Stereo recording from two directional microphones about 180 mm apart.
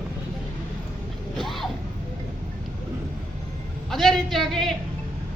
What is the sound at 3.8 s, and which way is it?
Speech, centre (ahead or behind).